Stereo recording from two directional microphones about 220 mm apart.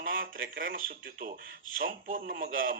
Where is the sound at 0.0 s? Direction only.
40° right (ahead or behind).